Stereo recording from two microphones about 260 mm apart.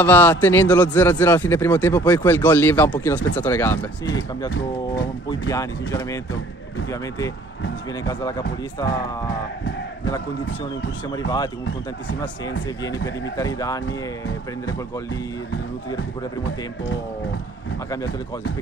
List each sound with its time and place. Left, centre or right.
0.0 s a man's voice: centre
8.1 s a man's voice: centre
11.2 s a man's voice: centre
12.8 s a man's voice: centre
13.8 s speech: left